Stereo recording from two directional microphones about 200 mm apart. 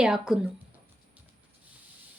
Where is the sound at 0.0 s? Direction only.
5° right (ahead or behind).